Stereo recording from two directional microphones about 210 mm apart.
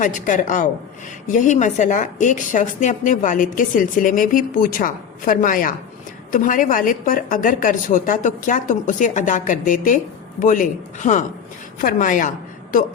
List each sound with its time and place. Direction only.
0.0 s a woman's voice: 40° left (ahead or behind)